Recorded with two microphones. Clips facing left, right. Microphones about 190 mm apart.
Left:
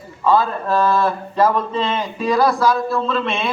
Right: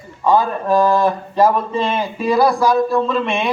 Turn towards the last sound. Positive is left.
turn(degrees=-15)  # may be behind; listen again after turning